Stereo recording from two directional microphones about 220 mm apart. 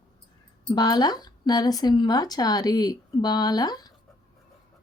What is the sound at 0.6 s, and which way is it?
Speech, 15° left (ahead or behind).